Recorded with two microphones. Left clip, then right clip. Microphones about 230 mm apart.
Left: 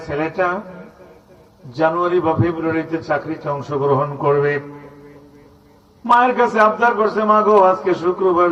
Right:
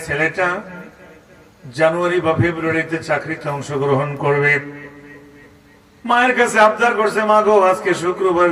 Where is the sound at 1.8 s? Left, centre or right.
Right.